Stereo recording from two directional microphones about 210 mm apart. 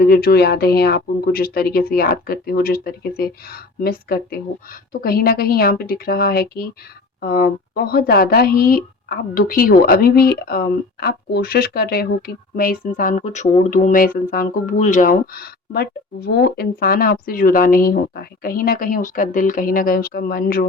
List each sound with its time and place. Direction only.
0.0 s speech: 45° left (ahead or behind)